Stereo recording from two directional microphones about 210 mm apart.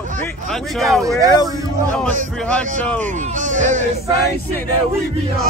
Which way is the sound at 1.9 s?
5° left (ahead or behind).